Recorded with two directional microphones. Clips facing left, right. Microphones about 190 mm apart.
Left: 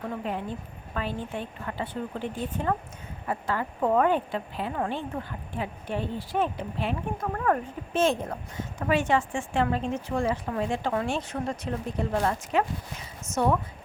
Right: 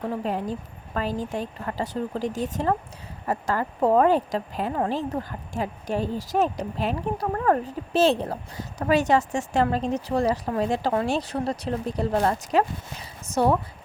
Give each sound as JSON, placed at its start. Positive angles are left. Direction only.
{"t": 0.1, "sound": "speech", "side_deg": -35}